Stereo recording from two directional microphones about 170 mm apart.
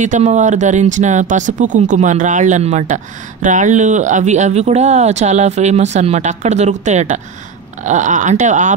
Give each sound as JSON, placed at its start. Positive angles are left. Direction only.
{"t": 0.0, "sound": "speech", "side_deg": -45}